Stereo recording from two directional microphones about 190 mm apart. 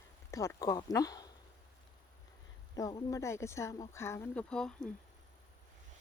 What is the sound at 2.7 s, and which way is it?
Speech, 20° left (ahead or behind).